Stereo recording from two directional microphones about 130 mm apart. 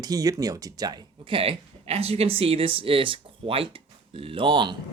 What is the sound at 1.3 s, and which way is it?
Speech, 50° right (ahead or behind).